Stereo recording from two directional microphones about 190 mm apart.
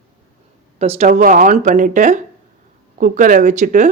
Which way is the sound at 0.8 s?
35° right (ahead or behind).